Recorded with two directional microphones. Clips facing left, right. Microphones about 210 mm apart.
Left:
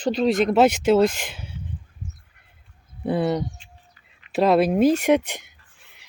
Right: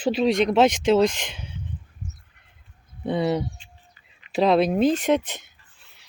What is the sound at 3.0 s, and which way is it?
Speech, 5° left (ahead or behind).